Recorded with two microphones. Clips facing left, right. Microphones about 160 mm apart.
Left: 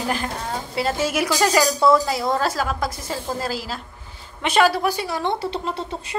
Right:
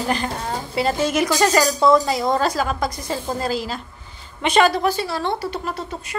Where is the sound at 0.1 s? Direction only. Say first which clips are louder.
Right 2 dB; centre (ahead or behind).